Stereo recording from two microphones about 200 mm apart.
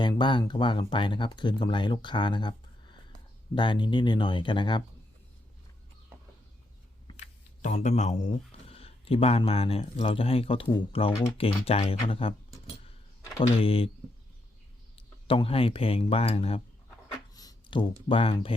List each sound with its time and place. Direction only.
0.0 s speech: 25° left (ahead or behind)
7.1 s speech: 35° left (ahead or behind)
13.4 s speech: 30° left (ahead or behind)
14.9 s speech: 30° left (ahead or behind)
17.3 s a sound: 20° left (ahead or behind)
18.1 s speech: 25° left (ahead or behind)